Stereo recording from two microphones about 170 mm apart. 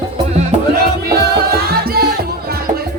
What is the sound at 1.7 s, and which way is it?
Music, 65° right (ahead or behind).